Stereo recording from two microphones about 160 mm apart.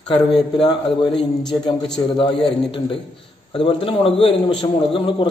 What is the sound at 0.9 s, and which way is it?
A man's voice, 30° left (ahead or behind).